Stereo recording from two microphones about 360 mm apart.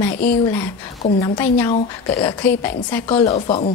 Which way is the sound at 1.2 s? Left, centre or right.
Centre.